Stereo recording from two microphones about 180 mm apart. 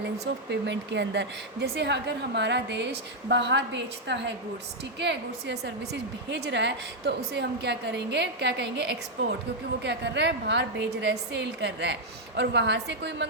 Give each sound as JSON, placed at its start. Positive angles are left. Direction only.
{"t": 0.3, "sound": "a woman's voice", "side_deg": -80}